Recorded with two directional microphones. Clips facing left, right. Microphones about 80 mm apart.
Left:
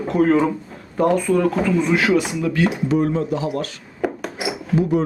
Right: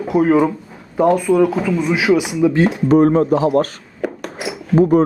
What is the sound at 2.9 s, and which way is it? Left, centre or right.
Speech, right.